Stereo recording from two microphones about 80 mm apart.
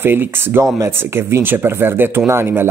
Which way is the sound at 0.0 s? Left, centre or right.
Right.